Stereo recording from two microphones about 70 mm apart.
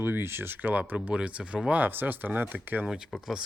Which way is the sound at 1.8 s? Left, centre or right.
Right.